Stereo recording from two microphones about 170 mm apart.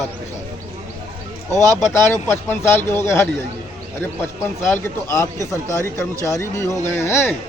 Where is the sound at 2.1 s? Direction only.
15° left (ahead or behind).